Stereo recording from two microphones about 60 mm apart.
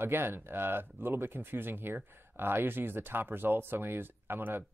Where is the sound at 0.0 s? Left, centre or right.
Right.